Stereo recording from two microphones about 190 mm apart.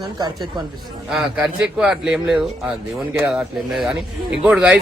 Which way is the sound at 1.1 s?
5° right (ahead or behind).